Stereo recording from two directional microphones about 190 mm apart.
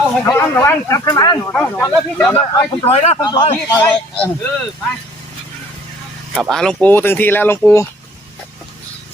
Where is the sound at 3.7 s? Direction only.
10° left (ahead or behind).